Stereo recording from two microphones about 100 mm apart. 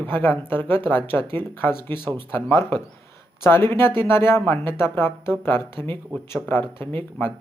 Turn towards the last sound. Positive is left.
turn(degrees=20)  # may be behind; listen again after turning